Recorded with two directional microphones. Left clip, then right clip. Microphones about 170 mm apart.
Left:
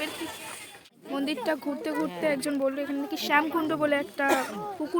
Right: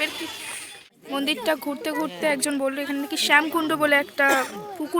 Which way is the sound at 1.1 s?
5° right (ahead or behind).